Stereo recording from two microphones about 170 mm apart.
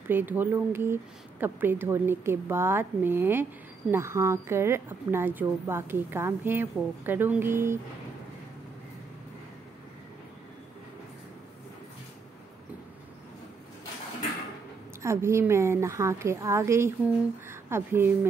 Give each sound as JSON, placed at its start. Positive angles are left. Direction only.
{"t": 0.1, "sound": "a woman's voice", "side_deg": -10}
{"t": 15.0, "sound": "a woman's voice", "side_deg": -15}